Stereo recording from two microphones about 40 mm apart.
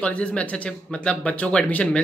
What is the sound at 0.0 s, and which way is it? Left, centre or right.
Speech, left.